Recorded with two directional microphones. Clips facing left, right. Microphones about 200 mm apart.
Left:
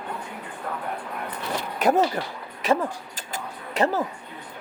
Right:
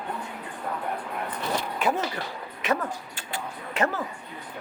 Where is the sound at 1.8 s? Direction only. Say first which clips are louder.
Left 9 dB; 40° left (ahead or behind).